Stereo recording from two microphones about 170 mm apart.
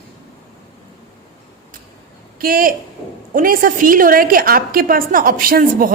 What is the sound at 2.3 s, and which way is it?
A woman's voice, 60° right (ahead or behind).